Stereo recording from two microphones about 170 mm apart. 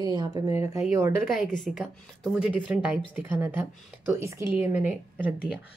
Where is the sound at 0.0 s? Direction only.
25° right (ahead or behind).